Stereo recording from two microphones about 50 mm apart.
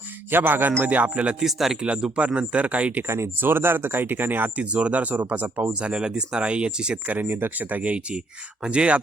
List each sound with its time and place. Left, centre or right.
0.3 s speech: right
0.9 s speech: right
1.4 s speech: centre
2.1 s speech: right
3.4 s speech: right
5.8 s speech: centre
7.1 s speech: right